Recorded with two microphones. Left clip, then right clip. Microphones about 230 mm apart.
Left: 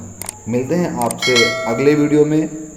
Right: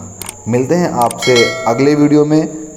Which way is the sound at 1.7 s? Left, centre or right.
Right.